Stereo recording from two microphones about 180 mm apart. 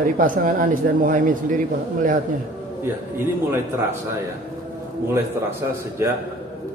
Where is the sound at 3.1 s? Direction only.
15° right (ahead or behind).